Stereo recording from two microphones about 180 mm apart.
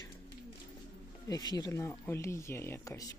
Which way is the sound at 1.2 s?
20° left (ahead or behind).